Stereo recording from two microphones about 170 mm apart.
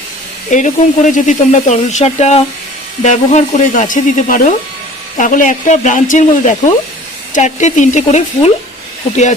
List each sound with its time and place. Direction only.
0.5 s speech: 45° left (ahead or behind)